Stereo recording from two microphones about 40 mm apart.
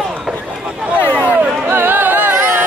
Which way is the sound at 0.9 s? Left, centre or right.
Left.